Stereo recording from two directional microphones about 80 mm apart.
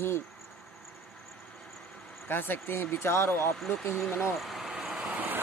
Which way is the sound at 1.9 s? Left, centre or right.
Centre.